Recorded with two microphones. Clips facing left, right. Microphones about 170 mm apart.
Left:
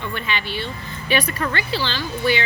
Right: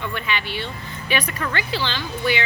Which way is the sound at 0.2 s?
15° right (ahead or behind).